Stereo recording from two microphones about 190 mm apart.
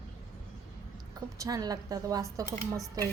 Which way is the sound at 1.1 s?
20° right (ahead or behind).